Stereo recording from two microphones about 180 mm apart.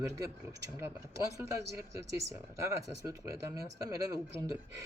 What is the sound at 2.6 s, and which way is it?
Speech, 15° right (ahead or behind).